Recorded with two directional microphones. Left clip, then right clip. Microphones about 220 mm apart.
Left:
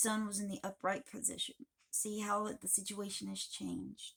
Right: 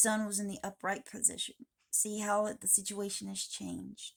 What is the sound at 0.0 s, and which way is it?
Speech, 45° right (ahead or behind).